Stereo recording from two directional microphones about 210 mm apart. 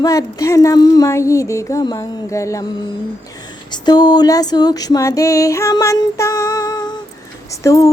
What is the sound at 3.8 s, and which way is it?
Music, 20° left (ahead or behind).